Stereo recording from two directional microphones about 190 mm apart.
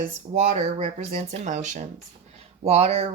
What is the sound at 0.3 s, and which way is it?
Speech, 35° right (ahead or behind).